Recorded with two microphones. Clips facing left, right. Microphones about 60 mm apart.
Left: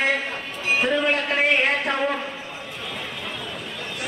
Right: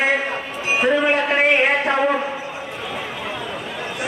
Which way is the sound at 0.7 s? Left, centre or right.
Centre.